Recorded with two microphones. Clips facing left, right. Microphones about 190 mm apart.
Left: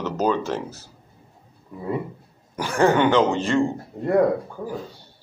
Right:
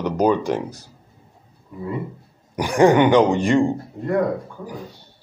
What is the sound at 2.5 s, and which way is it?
Speech, 15° right (ahead or behind).